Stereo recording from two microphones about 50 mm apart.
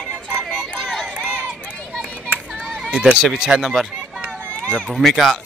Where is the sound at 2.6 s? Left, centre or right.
Centre.